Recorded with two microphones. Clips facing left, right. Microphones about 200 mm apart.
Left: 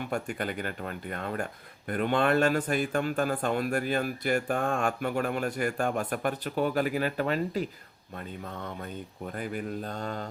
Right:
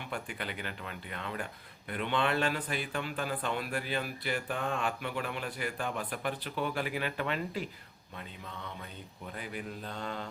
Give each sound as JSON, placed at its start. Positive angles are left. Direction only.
{"t": 0.0, "sound": "speech", "side_deg": 45}